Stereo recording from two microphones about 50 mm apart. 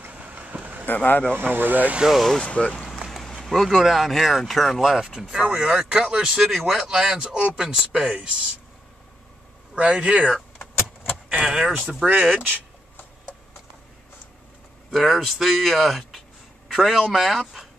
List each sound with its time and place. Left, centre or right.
0.1 s vehicle: right
0.5 s vehicle: right
0.8 s speech: left
1.3 s speech: right
2.4 s speech: left
3.4 s speech: centre
5.4 s speech: right
5.7 s speech: centre
9.8 s speech: right
12.1 s speech: centre
14.9 s a man's voice: centre